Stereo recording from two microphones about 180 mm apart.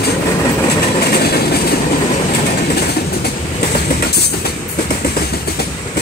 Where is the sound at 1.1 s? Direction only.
60° left (ahead or behind).